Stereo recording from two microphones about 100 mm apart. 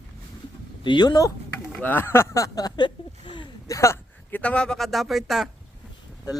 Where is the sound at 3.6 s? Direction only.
30° left (ahead or behind).